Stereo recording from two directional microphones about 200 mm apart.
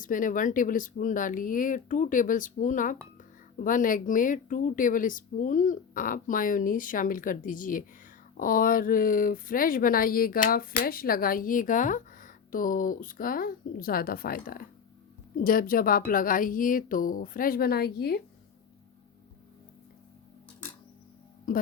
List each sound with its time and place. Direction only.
0.0 s speech: 40° left (ahead or behind)